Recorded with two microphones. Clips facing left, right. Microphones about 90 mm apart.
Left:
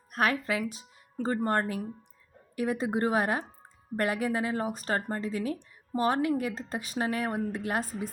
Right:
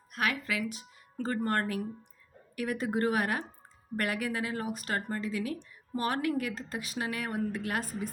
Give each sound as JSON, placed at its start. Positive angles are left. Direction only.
{"t": 0.1, "sound": "a woman's voice", "side_deg": 35}